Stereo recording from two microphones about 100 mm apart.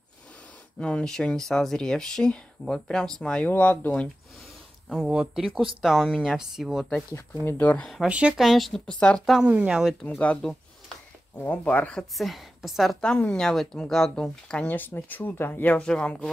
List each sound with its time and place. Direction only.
0.7 s speech: 10° left (ahead or behind)
5.0 s speech: 10° right (ahead or behind)
7.4 s speech: 20° left (ahead or behind)
7.7 s speech: 5° left (ahead or behind)
8.0 s speech: 10° right (ahead or behind)
9.5 s speech: 10° right (ahead or behind)
10.0 s speech: 15° left (ahead or behind)